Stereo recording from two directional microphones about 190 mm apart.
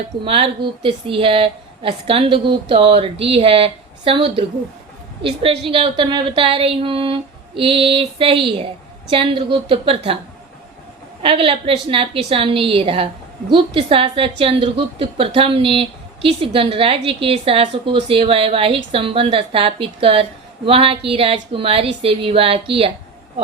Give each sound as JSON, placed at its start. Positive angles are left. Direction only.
{"t": 0.3, "sound": "a woman's voice", "side_deg": -30}
{"t": 11.2, "sound": "a woman's voice", "side_deg": -30}